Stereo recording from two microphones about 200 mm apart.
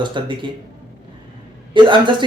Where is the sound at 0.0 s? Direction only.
25° right (ahead or behind).